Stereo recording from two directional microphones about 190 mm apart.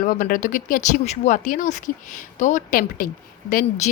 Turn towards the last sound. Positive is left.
turn(degrees=45)  # may be behind; listen again after turning